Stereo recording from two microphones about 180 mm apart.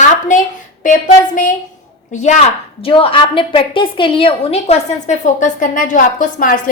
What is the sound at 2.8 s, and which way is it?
A woman's voice, 30° left (ahead or behind).